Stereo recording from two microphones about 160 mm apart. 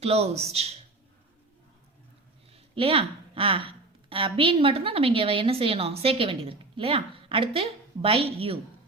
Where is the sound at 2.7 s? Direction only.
35° right (ahead or behind).